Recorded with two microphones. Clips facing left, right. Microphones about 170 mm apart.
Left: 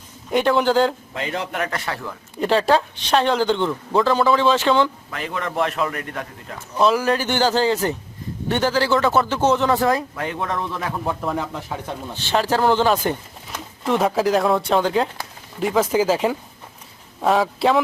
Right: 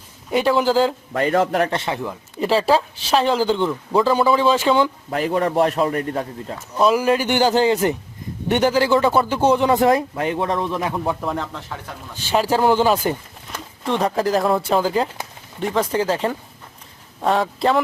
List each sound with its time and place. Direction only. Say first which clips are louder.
0.3 s speech: even; 5° right (ahead or behind)
1.1 s a man's voice: right 8 dB; 50° right (ahead or behind); by 2.1 s 20° right (ahead or behind)
2.4 s speech: even; 5° right (ahead or behind)
5.1 s a man's voice: right 9 dB; 40° right (ahead or behind)
6.7 s speech: right 1 dB; 10° right (ahead or behind)
11.2 s speech: left 1 dB; 5° left (ahead or behind)
12.1 s speech: right 2 dB; 10° right (ahead or behind)
13.5 s speech: left 1 dB; 5° left (ahead or behind)